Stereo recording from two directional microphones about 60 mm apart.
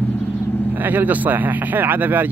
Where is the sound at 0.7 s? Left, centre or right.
Right.